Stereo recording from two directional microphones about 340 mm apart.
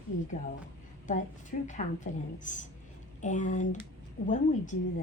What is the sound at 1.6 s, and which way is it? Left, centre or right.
A woman's voice, left.